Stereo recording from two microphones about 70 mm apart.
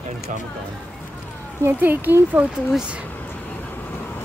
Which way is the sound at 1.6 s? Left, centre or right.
Right.